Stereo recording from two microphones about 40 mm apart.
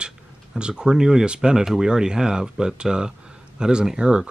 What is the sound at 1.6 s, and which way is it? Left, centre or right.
Speech, centre.